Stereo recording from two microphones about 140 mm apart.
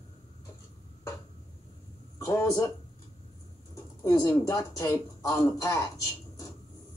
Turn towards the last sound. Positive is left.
turn(degrees=20)  # may be behind; listen again after turning